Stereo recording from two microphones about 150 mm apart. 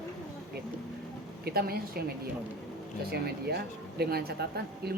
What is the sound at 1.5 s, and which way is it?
Speech, 90° right.